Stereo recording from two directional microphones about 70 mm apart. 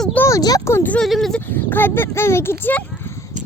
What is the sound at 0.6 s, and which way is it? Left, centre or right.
Speech, left.